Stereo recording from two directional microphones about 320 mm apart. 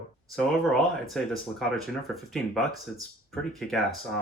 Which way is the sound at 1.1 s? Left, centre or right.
Centre.